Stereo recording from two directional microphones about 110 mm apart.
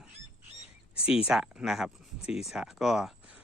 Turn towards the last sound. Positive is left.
turn(degrees=-5)  # may be behind; listen again after turning